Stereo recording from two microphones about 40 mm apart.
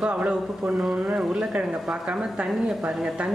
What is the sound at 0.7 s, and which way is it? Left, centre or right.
Speech, centre.